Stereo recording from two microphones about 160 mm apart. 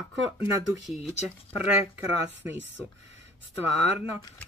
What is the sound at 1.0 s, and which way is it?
Speech, 10° right (ahead or behind).